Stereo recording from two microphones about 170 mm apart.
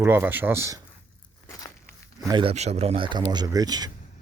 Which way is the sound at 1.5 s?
20° left (ahead or behind).